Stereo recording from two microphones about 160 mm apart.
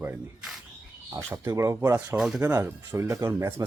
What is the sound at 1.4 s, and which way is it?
Speech, 20° right (ahead or behind).